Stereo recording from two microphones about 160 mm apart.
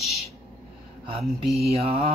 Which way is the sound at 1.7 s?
40° right (ahead or behind).